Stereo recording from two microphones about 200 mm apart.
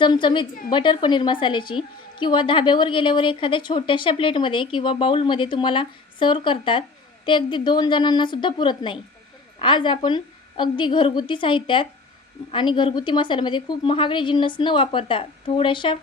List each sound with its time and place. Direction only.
0.0 s a woman's voice: 25° left (ahead or behind)